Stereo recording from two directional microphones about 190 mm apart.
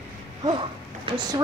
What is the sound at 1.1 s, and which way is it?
Speech, 30° right (ahead or behind).